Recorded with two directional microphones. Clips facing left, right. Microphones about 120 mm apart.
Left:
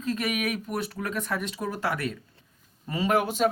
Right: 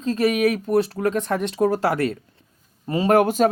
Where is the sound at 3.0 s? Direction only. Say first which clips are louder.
Right 7 dB; 50° right (ahead or behind).